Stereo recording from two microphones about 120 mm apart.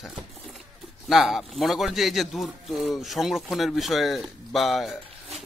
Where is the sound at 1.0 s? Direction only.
Centre (ahead or behind).